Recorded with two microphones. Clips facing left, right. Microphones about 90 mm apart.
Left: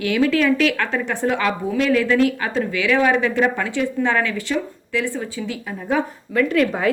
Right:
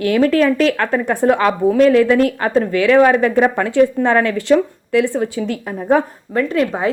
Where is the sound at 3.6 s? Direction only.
50° right (ahead or behind).